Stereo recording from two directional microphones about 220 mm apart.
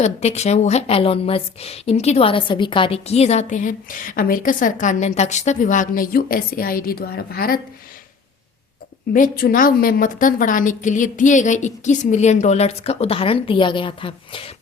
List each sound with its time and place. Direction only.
0.0 s a woman's voice: 30° left (ahead or behind)
9.1 s a woman's voice: 40° left (ahead or behind); by 14.5 s 25° left (ahead or behind)